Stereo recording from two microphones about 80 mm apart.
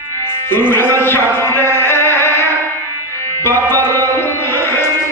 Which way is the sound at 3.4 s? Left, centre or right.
Left.